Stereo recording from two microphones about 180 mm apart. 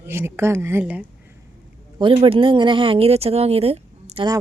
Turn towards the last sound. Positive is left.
turn(degrees=-30)  # may be behind; listen again after turning